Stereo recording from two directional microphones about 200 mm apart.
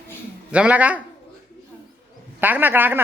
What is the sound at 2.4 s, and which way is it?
Speech, 10° right (ahead or behind).